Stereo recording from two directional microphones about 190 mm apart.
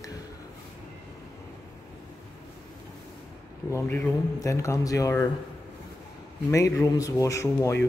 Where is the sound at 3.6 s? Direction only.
10° left (ahead or behind).